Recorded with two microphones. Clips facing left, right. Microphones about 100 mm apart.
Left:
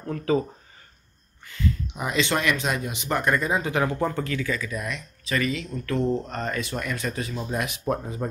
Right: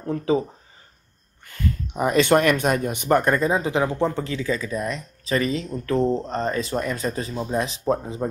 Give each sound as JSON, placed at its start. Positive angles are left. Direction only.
{"t": 0.0, "sound": "speech", "side_deg": -25}
{"t": 1.4, "sound": "speech", "side_deg": -45}